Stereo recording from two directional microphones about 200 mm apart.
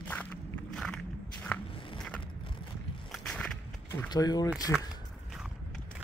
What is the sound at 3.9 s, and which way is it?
Speech, 15° left (ahead or behind).